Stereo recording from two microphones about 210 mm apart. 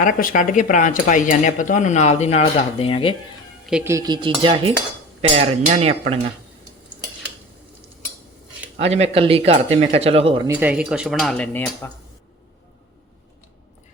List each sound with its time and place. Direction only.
0.0 s speech: 40° left (ahead or behind)
3.7 s cutlery: 10° right (ahead or behind); by 6.1 s 30° right (ahead or behind)
8.8 s cutlery: 30° right (ahead or behind)
10.4 s speech: 10° right (ahead or behind); by 11.9 s 10° left (ahead or behind)